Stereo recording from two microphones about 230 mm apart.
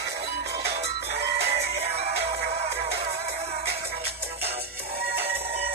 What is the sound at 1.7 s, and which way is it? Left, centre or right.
Music, right.